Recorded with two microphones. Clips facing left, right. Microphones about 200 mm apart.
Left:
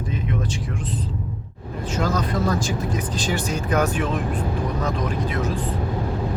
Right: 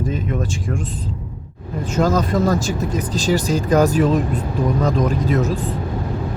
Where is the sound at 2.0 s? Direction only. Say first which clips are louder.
Right 6 dB; 45° right (ahead or behind).